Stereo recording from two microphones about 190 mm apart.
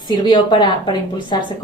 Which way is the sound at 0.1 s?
25° left (ahead or behind).